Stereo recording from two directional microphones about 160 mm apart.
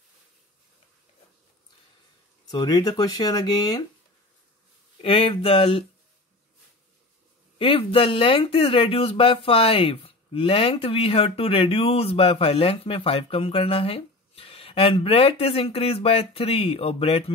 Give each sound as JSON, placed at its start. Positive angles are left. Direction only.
{"t": 2.4, "sound": "speech", "side_deg": 25}
{"t": 5.0, "sound": "speech", "side_deg": 35}
{"t": 7.5, "sound": "speech", "side_deg": 35}